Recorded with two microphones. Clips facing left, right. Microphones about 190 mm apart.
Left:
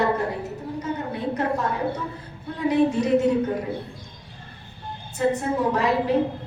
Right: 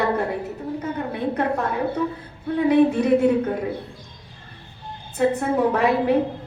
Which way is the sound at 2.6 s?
55° right (ahead or behind).